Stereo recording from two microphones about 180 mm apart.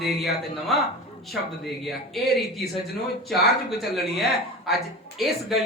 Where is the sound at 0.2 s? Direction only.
Centre (ahead or behind).